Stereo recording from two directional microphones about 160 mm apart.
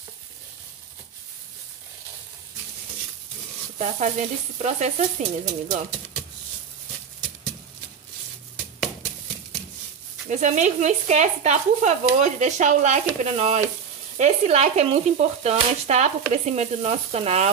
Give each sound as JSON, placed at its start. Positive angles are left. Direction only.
{"t": 3.7, "sound": "speech", "side_deg": -45}
{"t": 10.3, "sound": "speech", "side_deg": -50}